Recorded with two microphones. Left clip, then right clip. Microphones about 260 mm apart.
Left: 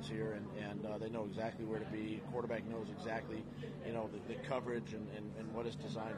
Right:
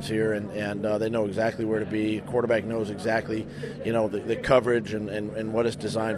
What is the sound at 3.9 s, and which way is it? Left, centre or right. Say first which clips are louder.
A man's voice: right 18 dB; right.